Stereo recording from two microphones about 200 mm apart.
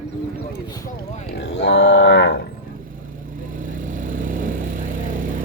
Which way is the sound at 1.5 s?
65° left (ahead or behind).